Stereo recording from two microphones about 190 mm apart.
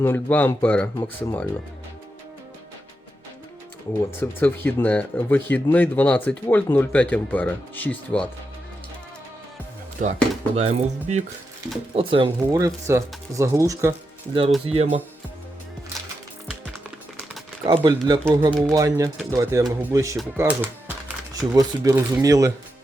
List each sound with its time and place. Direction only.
0.0 s speech: 10° left (ahead or behind)
4.2 s speech: 10° left (ahead or behind)
10.0 s speech: 45° right (ahead or behind)
10.5 s music: 35° right (ahead or behind)
11.9 s speech: 30° right (ahead or behind)
14.7 s music: 30° right (ahead or behind)
16.5 s music: centre (ahead or behind)
17.6 s speech: 20° right (ahead or behind)